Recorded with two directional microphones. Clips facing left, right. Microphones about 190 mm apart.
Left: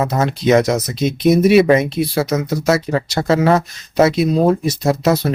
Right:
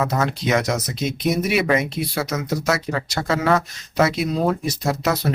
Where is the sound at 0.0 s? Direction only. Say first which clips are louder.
Left 5 dB; 25° left (ahead or behind).